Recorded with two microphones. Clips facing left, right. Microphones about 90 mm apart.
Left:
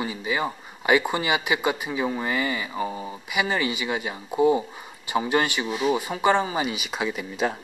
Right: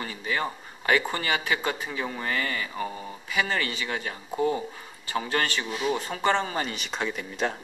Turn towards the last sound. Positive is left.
turn(degrees=5)  # may be behind; listen again after turning